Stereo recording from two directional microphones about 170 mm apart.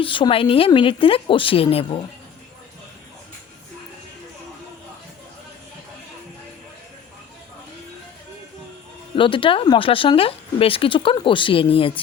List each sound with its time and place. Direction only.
0.0 s speech: 30° left (ahead or behind)
9.1 s speech: 30° left (ahead or behind)